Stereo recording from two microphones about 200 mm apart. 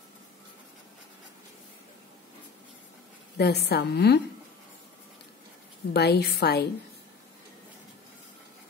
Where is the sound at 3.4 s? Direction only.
55° left (ahead or behind).